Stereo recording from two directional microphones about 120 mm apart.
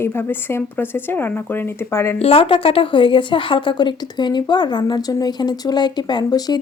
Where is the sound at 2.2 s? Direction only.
55° left (ahead or behind).